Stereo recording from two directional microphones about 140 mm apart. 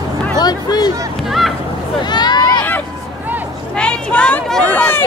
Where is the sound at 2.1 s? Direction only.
30° left (ahead or behind).